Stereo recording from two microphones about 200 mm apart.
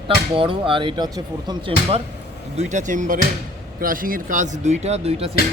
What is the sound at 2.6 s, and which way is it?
Speech, 40° right (ahead or behind).